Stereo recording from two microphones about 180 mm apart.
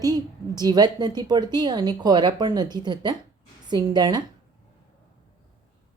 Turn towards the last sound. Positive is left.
turn(degrees=-20)  # may be behind; listen again after turning